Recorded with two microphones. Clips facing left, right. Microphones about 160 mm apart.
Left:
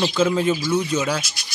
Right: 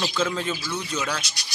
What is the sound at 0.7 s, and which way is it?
Speech, 25° left (ahead or behind).